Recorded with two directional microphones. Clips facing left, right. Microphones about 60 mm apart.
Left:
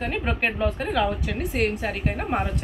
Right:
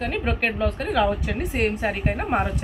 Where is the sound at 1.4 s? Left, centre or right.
Centre.